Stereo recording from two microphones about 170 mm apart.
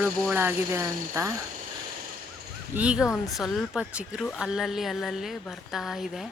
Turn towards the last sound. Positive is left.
turn(degrees=0)  # may be behind; listen again after turning